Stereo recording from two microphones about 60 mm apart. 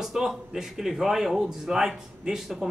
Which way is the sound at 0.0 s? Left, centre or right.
Centre.